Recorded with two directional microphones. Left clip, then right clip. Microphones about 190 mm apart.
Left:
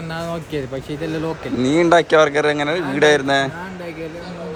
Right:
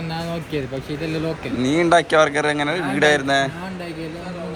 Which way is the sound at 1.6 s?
25° left (ahead or behind).